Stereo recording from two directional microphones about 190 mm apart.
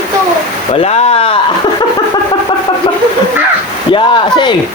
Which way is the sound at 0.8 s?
30° left (ahead or behind).